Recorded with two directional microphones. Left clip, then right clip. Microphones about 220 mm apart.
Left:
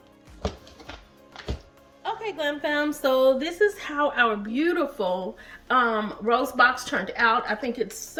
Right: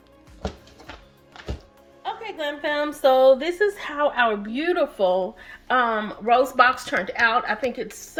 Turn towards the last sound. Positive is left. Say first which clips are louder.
# right 2 dB
turn(degrees=-10)  # may be behind; listen again after turning